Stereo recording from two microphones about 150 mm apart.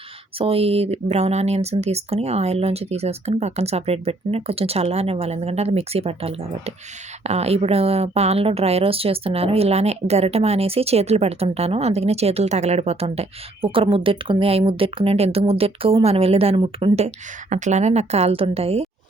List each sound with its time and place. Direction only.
0.3 s a woman's voice: 40° right (ahead or behind)
17.5 s a woman's voice: 50° right (ahead or behind)